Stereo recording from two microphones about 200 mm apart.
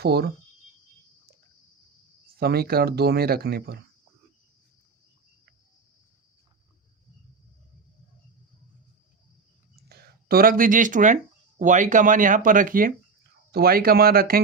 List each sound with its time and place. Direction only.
0.0 s speech: 50° right (ahead or behind)
2.3 s speech: 50° right (ahead or behind)
9.8 s speech: 50° right (ahead or behind)